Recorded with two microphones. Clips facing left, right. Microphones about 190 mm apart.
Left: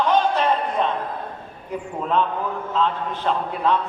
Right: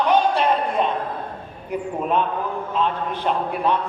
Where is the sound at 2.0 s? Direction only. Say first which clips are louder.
Left 1 dB; 15° right (ahead or behind).